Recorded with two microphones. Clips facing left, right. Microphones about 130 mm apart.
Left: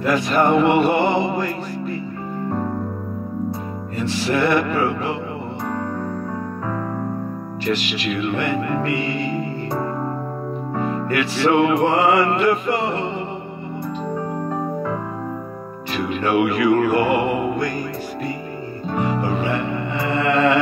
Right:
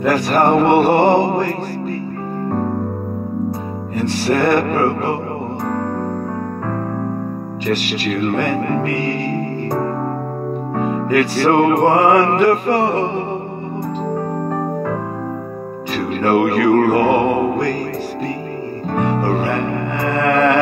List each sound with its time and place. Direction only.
0.1 s music: 60° right (ahead or behind)
4.0 s music: 60° right (ahead or behind)
7.7 s speech: 50° right (ahead or behind)
11.1 s music: 50° right (ahead or behind)
16.0 s music: 50° right (ahead or behind)
18.9 s music: 50° right (ahead or behind)